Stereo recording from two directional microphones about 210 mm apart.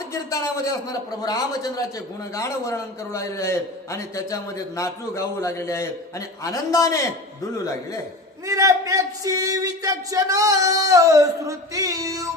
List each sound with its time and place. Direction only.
0.1 s a man's voice: 15° left (ahead or behind)
8.4 s a man's voice: 15° right (ahead or behind)